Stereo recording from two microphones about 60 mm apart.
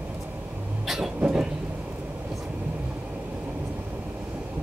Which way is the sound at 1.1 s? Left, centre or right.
Centre.